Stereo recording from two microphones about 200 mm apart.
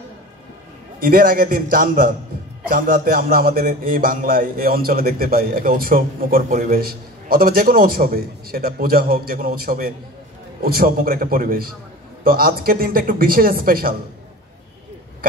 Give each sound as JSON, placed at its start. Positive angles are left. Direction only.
{"t": 0.9, "sound": "a man's voice", "side_deg": -45}